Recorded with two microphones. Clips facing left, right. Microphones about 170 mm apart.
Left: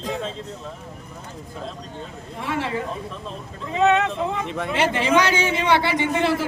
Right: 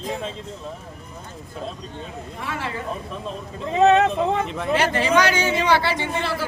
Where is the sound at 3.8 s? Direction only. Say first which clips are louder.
Right 3 dB; 35° right (ahead or behind).